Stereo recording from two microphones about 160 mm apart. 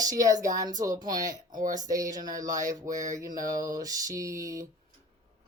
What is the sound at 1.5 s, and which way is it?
Speech, 55° right (ahead or behind).